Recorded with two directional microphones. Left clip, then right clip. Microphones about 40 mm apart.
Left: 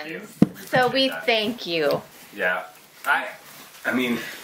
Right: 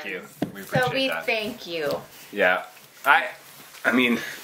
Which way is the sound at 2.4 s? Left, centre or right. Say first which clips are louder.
Right 4 dB; right.